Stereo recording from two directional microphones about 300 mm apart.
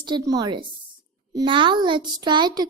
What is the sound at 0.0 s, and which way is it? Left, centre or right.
A child's voice, centre.